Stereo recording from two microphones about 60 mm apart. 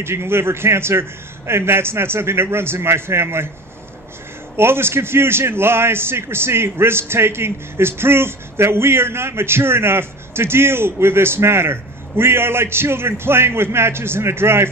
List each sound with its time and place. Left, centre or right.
0.0 s a man's voice: right
4.6 s a man's voice: right